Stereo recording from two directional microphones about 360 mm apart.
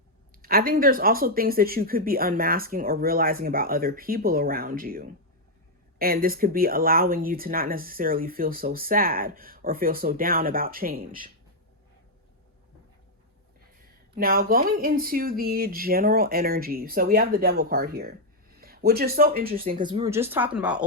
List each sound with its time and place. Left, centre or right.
0.4 s speech: right
14.2 s speech: right; by 20.8 s centre